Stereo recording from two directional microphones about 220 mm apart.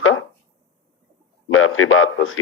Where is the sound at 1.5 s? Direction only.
70° left (ahead or behind).